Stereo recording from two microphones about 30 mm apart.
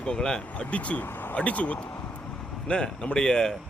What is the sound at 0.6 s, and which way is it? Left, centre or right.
Speech, left.